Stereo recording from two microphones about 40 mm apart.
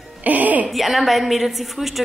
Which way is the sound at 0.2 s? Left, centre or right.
Right.